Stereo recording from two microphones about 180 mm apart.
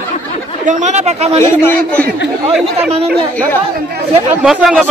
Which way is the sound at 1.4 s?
10° left (ahead or behind).